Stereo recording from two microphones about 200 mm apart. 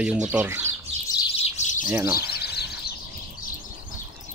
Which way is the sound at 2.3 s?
55° left (ahead or behind).